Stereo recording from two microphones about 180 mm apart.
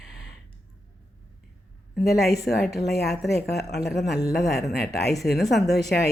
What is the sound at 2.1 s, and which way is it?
A woman's voice, 60° left (ahead or behind).